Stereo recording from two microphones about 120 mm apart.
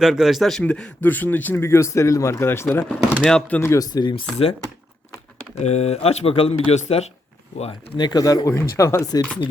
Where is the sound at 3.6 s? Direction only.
25° left (ahead or behind).